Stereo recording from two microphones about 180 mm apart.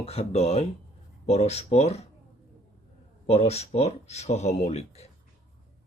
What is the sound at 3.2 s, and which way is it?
Speech, 35° left (ahead or behind).